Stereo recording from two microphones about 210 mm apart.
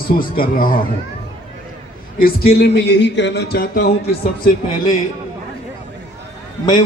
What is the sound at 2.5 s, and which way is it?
A man's voice, 55° left (ahead or behind).